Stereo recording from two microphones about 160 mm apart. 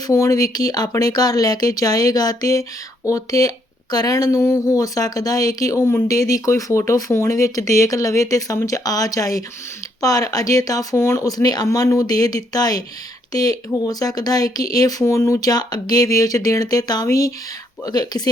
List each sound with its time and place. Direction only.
0.1 s speech: 20° left (ahead or behind)